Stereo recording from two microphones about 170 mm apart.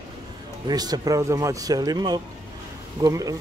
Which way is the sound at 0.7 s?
25° right (ahead or behind).